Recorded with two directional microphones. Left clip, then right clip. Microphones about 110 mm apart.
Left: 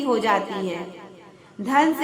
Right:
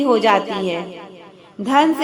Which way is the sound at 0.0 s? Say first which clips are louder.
Right 6 dB; 35° right (ahead or behind).